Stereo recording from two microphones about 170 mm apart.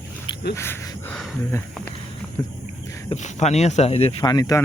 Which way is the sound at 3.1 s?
40° left (ahead or behind).